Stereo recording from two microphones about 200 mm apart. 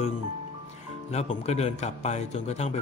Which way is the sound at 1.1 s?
35° left (ahead or behind).